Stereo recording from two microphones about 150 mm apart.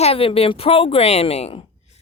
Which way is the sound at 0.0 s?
40° left (ahead or behind).